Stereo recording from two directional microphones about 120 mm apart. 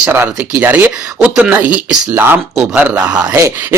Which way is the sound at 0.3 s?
10° right (ahead or behind).